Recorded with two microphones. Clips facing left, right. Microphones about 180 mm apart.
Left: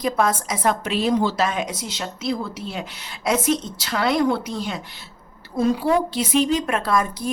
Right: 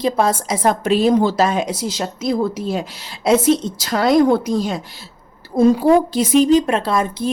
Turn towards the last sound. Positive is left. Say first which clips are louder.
# right 3 dB
turn(degrees=-25)  # may be behind; listen again after turning